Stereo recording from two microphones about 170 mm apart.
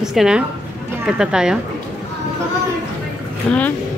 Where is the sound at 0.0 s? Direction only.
5° right (ahead or behind).